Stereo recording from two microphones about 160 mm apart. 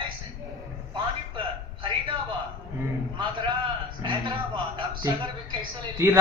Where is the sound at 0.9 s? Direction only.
30° right (ahead or behind).